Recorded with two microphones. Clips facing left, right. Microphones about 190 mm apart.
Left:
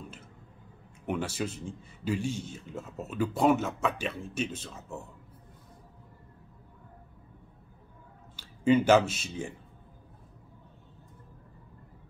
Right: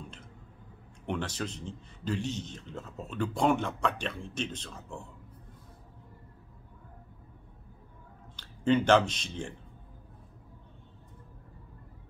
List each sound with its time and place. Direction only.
1.0 s a man's voice: 10° left (ahead or behind)
8.4 s speech: 10° left (ahead or behind)